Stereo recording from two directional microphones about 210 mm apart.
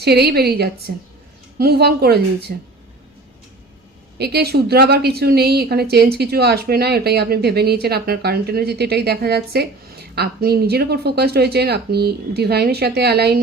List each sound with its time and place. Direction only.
0.0 s a woman's voice: 50° right (ahead or behind)
4.2 s a woman's voice: 50° right (ahead or behind)